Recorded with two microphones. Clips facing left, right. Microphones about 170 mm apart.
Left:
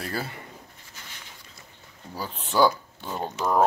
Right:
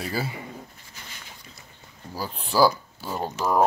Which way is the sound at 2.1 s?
Centre (ahead or behind).